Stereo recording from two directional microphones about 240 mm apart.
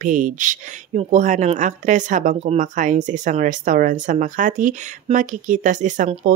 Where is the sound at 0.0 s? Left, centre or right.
Right.